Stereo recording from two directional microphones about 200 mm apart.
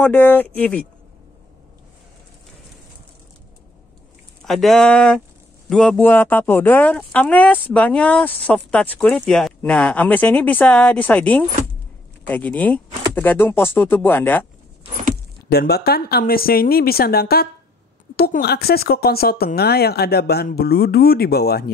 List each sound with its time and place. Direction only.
0.0 s speech: 10° left (ahead or behind)
4.5 s speech: centre (ahead or behind)
15.5 s speech: 50° left (ahead or behind)